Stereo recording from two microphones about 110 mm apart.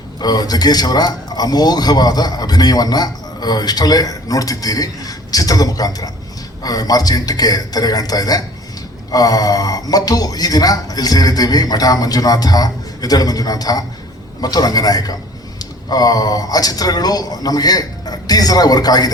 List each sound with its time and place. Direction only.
0.2 s a man's voice: 35° left (ahead or behind)